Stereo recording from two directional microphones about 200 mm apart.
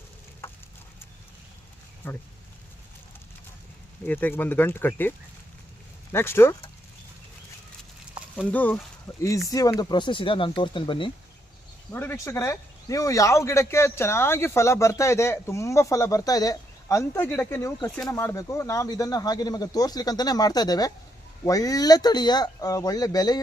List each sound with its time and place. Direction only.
2.0 s speech: 10° left (ahead or behind)
4.0 s speech: 10° left (ahead or behind)
8.4 s speech: 10° left (ahead or behind); by 11.1 s 25° left (ahead or behind)
11.9 s speech: 10° left (ahead or behind)